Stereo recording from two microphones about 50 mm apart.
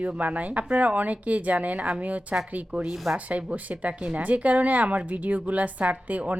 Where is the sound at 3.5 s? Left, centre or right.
Right.